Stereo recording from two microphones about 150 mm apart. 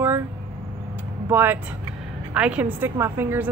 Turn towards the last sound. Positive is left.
turn(degrees=-15)  # may be behind; listen again after turning